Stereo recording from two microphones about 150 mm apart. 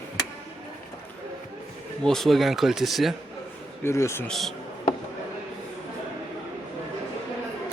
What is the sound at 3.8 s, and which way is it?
Speech, 20° left (ahead or behind).